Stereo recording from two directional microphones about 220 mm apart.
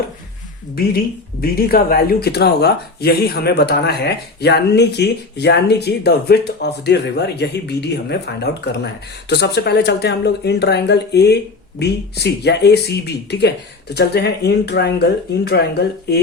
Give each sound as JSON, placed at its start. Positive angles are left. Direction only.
{"t": 0.8, "sound": "speech", "side_deg": 45}